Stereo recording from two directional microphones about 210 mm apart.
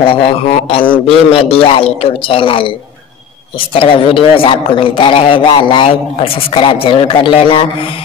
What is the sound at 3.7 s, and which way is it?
Speech, 25° left (ahead or behind).